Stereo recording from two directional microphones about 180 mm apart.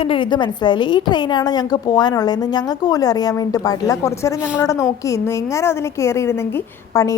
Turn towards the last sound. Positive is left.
turn(degrees=15)  # may be behind; listen again after turning